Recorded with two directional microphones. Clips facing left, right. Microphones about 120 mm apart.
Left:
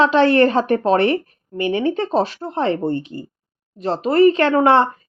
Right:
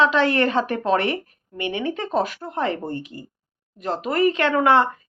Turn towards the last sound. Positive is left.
turn(degrees=35)  # may be behind; listen again after turning